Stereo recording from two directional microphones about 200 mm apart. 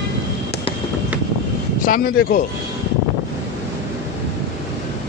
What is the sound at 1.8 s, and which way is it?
Speech, 45° left (ahead or behind).